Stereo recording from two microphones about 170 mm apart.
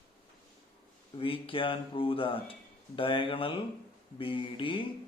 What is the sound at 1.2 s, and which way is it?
Speech, 30° left (ahead or behind).